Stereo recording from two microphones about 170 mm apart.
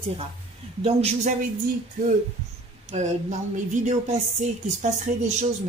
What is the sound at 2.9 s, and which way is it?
A man's voice, 40° right (ahead or behind).